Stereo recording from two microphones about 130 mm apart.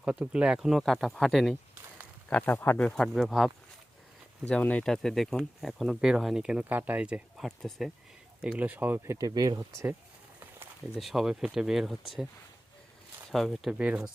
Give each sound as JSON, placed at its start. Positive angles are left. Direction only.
{"t": 0.0, "sound": "speech", "side_deg": -10}
{"t": 2.3, "sound": "speech", "side_deg": 15}
{"t": 2.9, "sound": "speech", "side_deg": 0}
{"t": 7.4, "sound": "speech", "side_deg": 0}
{"t": 8.4, "sound": "speech", "side_deg": -10}
{"t": 9.6, "sound": "speech", "side_deg": -15}
{"t": 10.9, "sound": "speech", "side_deg": 0}
{"t": 13.3, "sound": "speech", "side_deg": 0}